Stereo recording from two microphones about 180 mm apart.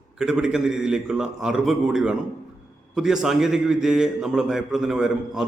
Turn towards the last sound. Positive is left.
turn(degrees=0)  # may be behind; listen again after turning